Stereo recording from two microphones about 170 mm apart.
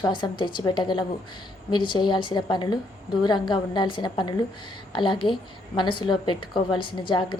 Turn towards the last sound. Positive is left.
turn(degrees=30)  # may be behind; listen again after turning